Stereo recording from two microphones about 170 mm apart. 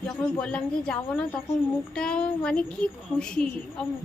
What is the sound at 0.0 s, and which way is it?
A woman's voice, 5° left (ahead or behind).